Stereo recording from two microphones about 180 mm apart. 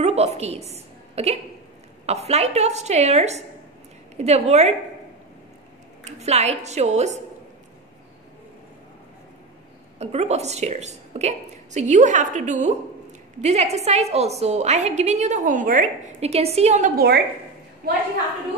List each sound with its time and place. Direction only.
0.0 s a woman's voice: 35° right (ahead or behind)
6.0 s a woman's voice: 35° right (ahead or behind)
9.9 s a woman's voice: 35° right (ahead or behind)
16.9 s a woman's voice: 60° right (ahead or behind)